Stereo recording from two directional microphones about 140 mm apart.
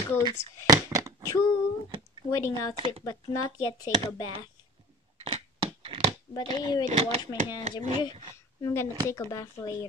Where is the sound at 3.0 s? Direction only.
25° left (ahead or behind).